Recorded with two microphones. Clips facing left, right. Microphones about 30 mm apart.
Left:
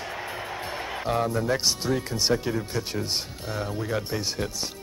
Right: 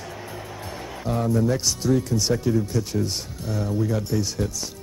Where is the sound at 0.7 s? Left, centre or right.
Left.